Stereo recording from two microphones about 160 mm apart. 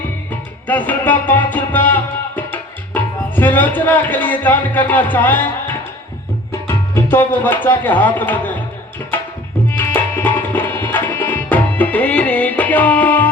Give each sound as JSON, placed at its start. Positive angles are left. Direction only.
{"t": 0.3, "sound": "music", "side_deg": 10}
{"t": 6.5, "sound": "speech", "side_deg": 15}
{"t": 9.6, "sound": "music", "side_deg": 15}